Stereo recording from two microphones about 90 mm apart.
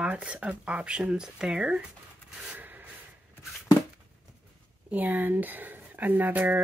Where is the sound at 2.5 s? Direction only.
20° right (ahead or behind).